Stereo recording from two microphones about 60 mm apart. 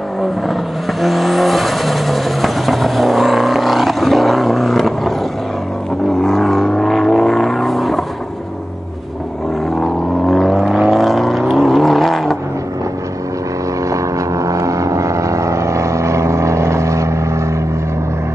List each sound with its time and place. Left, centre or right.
1.0 s vehicle: centre
6.2 s didgeridoo: centre
9.8 s vehicle: centre
13.8 s vehicle: right